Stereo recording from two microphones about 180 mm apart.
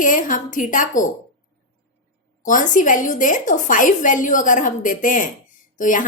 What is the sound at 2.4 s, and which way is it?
A woman's voice, 45° left (ahead or behind).